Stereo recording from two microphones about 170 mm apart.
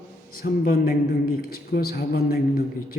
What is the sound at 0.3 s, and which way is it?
A man's voice, 60° left (ahead or behind).